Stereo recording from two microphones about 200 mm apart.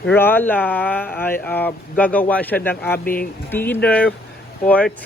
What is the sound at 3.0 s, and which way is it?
Speech, 45° left (ahead or behind).